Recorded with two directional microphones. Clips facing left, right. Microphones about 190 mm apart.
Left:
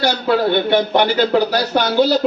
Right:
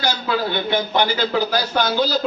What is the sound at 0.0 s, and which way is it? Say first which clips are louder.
A man's voice: left 6 dB; 60° left (ahead or behind).